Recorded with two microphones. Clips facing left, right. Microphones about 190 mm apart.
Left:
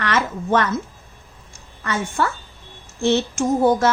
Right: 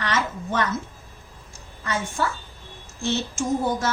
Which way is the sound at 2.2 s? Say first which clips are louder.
Left 4 dB; 65° left (ahead or behind).